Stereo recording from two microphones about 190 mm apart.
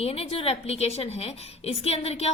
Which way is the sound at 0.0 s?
30° left (ahead or behind).